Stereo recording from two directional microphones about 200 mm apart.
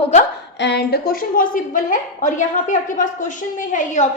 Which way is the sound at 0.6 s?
60° left (ahead or behind).